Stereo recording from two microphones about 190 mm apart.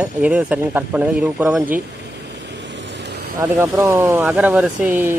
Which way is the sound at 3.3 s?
15° right (ahead or behind).